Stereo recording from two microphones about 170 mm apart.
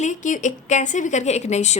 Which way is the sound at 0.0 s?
45° left (ahead or behind).